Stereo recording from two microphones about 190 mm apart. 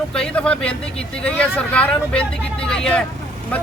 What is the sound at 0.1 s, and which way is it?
Speech, 5° left (ahead or behind).